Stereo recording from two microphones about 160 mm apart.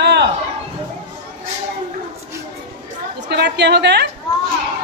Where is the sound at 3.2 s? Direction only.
90° right.